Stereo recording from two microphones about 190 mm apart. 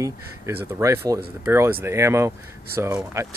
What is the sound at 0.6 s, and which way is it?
Speech, 15° right (ahead or behind).